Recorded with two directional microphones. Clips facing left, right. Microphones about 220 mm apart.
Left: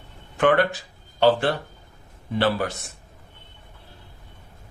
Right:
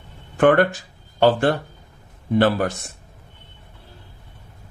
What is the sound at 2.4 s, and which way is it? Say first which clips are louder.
Speech: right 4 dB; 45° right (ahead or behind).